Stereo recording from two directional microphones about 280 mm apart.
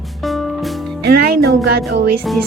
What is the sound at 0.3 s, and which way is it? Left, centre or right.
Music, centre.